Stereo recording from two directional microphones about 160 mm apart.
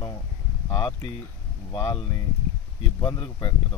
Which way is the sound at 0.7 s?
25° left (ahead or behind).